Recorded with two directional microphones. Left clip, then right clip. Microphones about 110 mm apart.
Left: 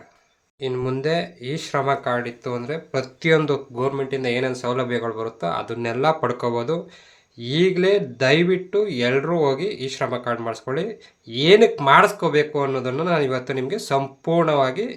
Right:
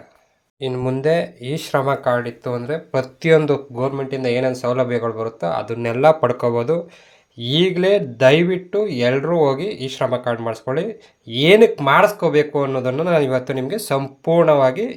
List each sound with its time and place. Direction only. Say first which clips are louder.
0.6 s speech: right 3 dB; 20° right (ahead or behind)
11.8 s speech: right 1 dB; 10° right (ahead or behind)